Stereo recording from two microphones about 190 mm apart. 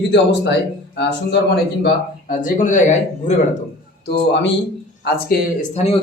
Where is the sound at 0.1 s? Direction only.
70° left (ahead or behind).